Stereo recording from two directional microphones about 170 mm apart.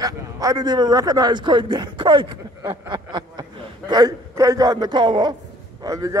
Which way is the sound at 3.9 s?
20° right (ahead or behind).